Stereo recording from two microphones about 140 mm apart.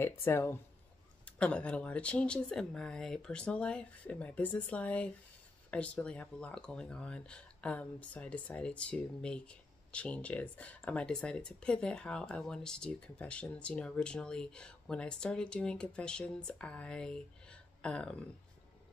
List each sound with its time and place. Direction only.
0.0 s speech: 15° left (ahead or behind)